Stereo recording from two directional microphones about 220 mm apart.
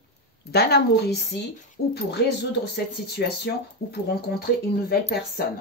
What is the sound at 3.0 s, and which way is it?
Speech, 45° left (ahead or behind).